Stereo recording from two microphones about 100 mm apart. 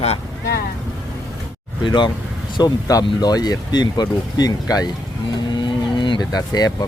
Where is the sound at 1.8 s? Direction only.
50° left (ahead or behind).